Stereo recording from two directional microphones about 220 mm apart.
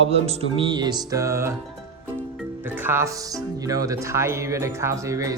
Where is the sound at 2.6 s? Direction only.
10° right (ahead or behind).